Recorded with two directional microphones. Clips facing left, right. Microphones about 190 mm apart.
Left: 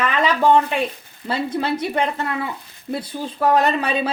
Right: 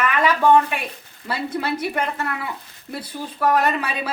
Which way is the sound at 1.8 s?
25° left (ahead or behind).